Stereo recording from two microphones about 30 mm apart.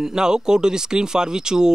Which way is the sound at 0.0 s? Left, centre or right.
Right.